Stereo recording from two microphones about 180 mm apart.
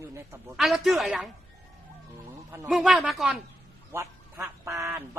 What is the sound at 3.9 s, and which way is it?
Speech, 15° right (ahead or behind).